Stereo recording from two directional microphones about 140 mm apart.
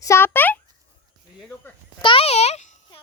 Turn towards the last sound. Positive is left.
turn(degrees=50)  # may be behind; listen again after turning